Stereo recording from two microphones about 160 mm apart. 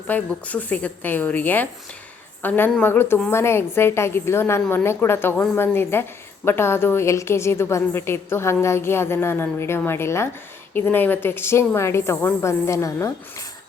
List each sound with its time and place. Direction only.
0.1 s a woman's voice: 10° left (ahead or behind)